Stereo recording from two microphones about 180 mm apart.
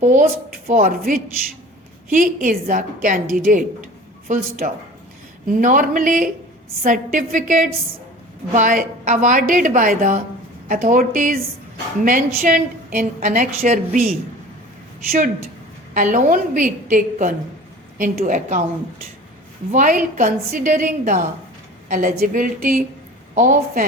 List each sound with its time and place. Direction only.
0.0 s a woman's voice: 45° right (ahead or behind)
16.0 s a woman's voice: 45° right (ahead or behind)
19.7 s a woman's voice: 45° right (ahead or behind)